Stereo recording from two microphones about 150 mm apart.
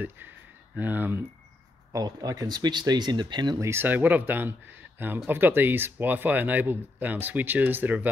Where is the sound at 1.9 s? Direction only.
25° right (ahead or behind).